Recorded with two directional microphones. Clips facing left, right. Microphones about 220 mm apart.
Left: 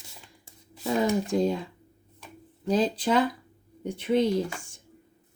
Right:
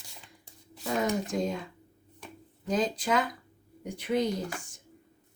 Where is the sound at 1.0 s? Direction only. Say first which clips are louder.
Left 5 dB; 30° left (ahead or behind).